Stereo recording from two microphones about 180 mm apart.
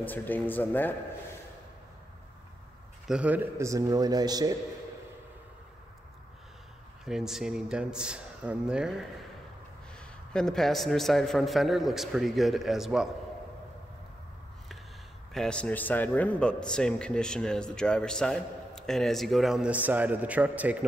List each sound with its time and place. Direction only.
0.0 s speech: 10° left (ahead or behind)
3.1 s a man's voice: 5° right (ahead or behind)
7.1 s a man's voice: centre (ahead or behind)
15.3 s a man's voice: 5° left (ahead or behind)